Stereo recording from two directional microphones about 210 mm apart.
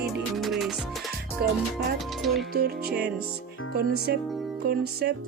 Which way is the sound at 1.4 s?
45° right (ahead or behind).